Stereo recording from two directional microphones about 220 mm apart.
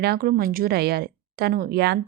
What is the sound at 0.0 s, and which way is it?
Speech, 45° right (ahead or behind).